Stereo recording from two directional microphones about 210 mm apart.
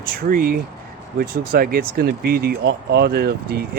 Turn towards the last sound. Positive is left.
turn(degrees=-50)  # may be behind; listen again after turning